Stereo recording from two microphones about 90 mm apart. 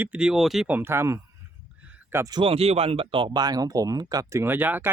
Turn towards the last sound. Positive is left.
turn(degrees=-20)  # may be behind; listen again after turning